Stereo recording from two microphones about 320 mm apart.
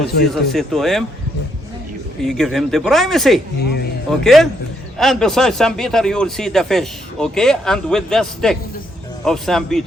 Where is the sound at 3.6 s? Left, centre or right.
Left.